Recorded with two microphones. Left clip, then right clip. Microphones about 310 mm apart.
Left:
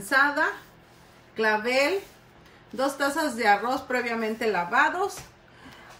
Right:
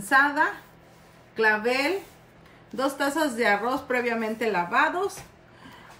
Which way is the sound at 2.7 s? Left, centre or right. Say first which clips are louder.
Even; centre.